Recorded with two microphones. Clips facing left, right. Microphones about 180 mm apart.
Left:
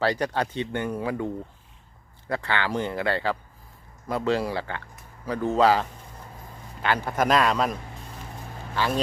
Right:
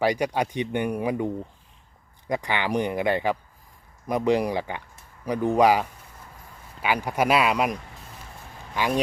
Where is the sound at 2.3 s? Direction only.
15° right (ahead or behind).